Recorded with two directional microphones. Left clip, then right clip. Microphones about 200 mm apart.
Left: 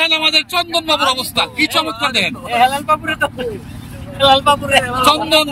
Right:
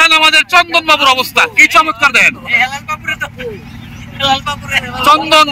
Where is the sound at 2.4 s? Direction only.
45° left (ahead or behind).